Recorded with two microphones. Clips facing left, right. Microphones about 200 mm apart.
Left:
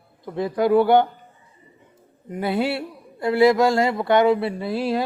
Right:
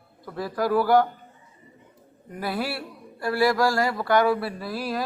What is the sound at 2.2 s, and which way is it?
A man's voice, 20° left (ahead or behind).